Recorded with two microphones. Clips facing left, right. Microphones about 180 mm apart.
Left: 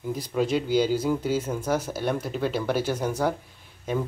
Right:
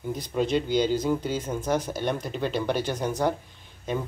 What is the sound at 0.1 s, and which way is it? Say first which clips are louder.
Speech: even; 5° left (ahead or behind).